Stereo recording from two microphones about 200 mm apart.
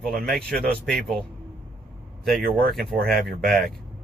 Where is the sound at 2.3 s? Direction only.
45° right (ahead or behind).